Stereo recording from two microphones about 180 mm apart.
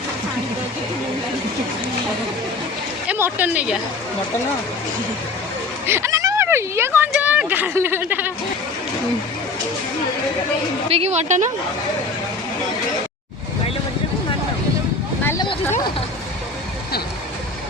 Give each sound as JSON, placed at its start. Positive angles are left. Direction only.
{"t": 3.1, "sound": "speech", "side_deg": -10}
{"t": 5.8, "sound": "speech", "side_deg": -15}
{"t": 10.8, "sound": "a woman's voice", "side_deg": -35}
{"t": 15.2, "sound": "a sound", "side_deg": 15}